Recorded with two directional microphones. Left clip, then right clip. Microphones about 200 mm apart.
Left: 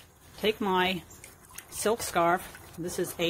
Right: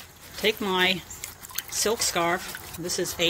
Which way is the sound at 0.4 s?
10° left (ahead or behind).